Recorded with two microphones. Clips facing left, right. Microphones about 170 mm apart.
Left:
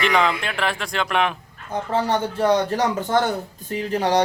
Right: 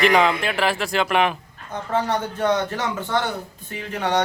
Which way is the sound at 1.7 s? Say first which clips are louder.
Left 1 dB; 30° left (ahead or behind).